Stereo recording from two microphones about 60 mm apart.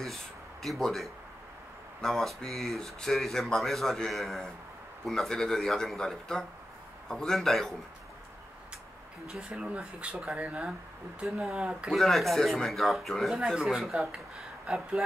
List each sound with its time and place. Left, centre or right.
0.0 s speech: centre
9.4 s speech: centre
11.2 s speech: centre
11.9 s speech: centre